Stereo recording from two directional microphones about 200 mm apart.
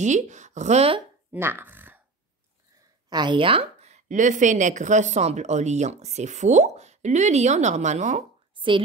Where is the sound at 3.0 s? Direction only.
20° right (ahead or behind).